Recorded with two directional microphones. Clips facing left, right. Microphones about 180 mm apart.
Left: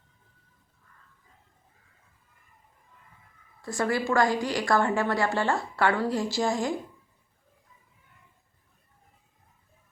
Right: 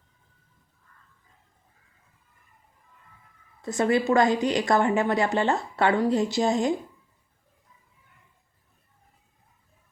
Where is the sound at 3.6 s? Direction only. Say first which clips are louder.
Right 5 dB; 20° right (ahead or behind).